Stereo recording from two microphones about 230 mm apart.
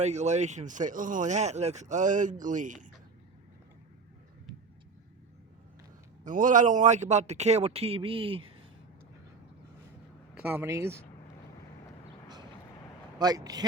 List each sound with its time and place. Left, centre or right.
0.0 s speech: right
4.5 s vehicle: centre
6.2 s speech: right
10.3 s speech: centre
13.1 s speech: centre